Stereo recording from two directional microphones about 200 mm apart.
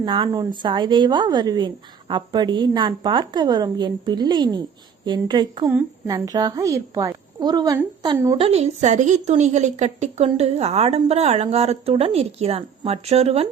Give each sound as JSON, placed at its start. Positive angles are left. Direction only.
{"t": 0.0, "sound": "a woman's voice", "side_deg": -20}
{"t": 8.4, "sound": "a woman's voice", "side_deg": -30}